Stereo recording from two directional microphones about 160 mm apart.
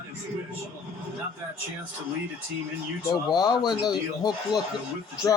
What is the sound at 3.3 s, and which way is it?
Speech, 25° left (ahead or behind).